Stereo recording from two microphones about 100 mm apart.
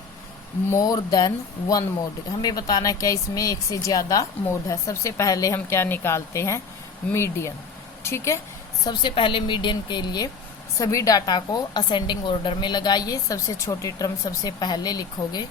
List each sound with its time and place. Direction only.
0.7 s a woman's voice: 35° left (ahead or behind)
8.8 s a woman's voice: 45° left (ahead or behind)
9.1 s a woman's voice: 55° left (ahead or behind)
10.8 s a woman's voice: 35° left (ahead or behind)